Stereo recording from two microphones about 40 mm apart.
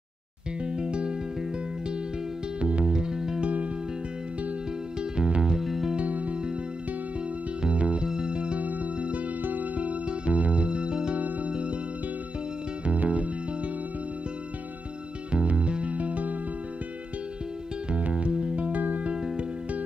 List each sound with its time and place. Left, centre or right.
0.7 s music: right
2.6 s music: right
5.1 s music: right
5.6 s music: centre
5.9 s music: right
7.6 s music: right
8.5 s music: right
9.4 s music: right
9.8 s music: right
11.1 s music: right
12.8 s music: right
15.3 s music: right
17.9 s music: right
19.0 s music: centre